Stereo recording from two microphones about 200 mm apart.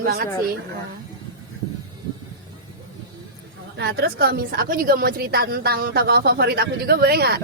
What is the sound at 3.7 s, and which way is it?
A woman's voice, 50° right (ahead or behind).